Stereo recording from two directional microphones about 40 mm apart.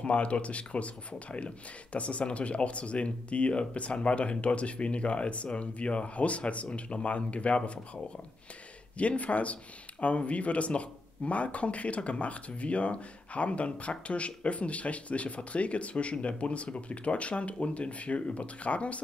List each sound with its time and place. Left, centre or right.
0.0 s speech: left